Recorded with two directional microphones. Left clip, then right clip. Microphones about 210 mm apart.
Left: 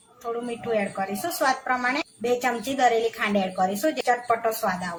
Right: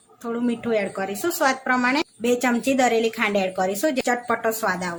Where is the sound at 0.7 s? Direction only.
35° right (ahead or behind).